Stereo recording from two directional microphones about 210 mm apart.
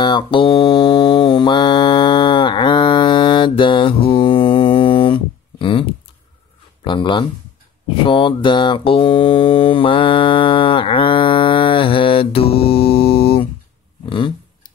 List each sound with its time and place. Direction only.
0.0 s mantra: 20° left (ahead or behind)
6.8 s speech: 25° left (ahead or behind)
8.0 s mantra: 25° left (ahead or behind)
14.0 s a sound: 25° left (ahead or behind)